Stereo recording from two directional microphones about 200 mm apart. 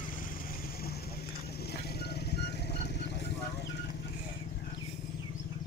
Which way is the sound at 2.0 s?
55° left (ahead or behind).